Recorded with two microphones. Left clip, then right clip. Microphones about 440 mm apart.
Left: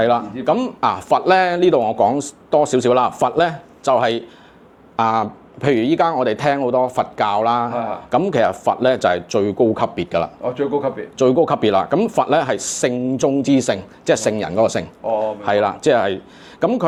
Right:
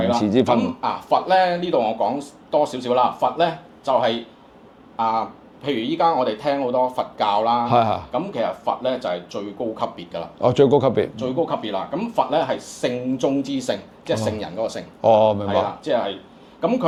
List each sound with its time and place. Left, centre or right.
0.6 s speech: left
5.6 s speech: left
7.7 s speech: right
8.1 s speech: left
10.4 s speech: right
11.2 s speech: left
15.0 s speech: right
15.4 s speech: left
16.6 s speech: left